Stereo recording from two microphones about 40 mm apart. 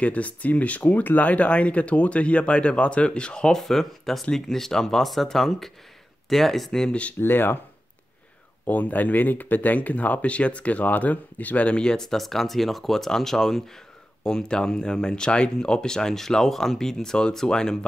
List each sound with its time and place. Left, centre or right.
0.0 s speech: left
3.5 s speech: centre
7.2 s speech: left
8.6 s speech: left
11.8 s speech: centre
12.1 s speech: centre